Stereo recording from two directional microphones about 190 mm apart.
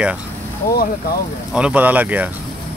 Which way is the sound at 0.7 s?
50° left (ahead or behind).